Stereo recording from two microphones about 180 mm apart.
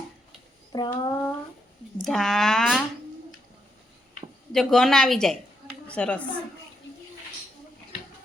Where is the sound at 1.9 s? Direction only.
Centre (ahead or behind).